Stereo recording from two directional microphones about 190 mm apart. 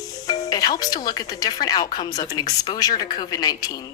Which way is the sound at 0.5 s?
20° left (ahead or behind).